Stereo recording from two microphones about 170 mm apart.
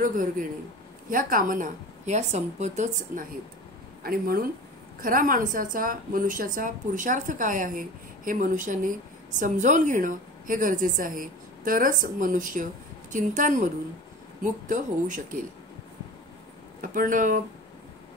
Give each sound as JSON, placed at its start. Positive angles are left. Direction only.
{"t": 0.0, "sound": "a woman's voice", "side_deg": -50}
{"t": 4.0, "sound": "a woman's voice", "side_deg": -60}
{"t": 16.8, "sound": "a woman's voice", "side_deg": -50}